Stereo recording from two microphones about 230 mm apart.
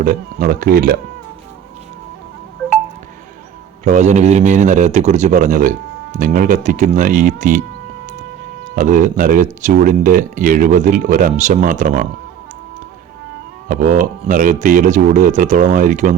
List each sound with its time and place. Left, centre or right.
0.0 s speech: right
3.8 s speech: right
8.6 s speech: right
13.7 s speech: right